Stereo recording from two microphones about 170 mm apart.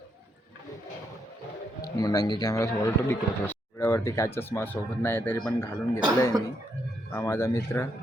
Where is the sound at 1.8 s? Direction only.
20° left (ahead or behind).